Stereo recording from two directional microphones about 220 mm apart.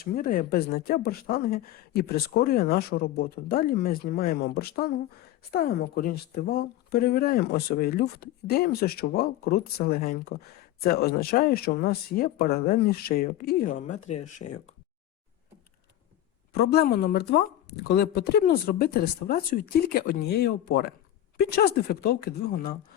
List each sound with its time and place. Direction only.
0.0 s speech: 40° left (ahead or behind)
16.6 s speech: 45° left (ahead or behind)